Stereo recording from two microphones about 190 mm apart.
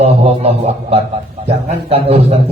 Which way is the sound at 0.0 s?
35° right (ahead or behind).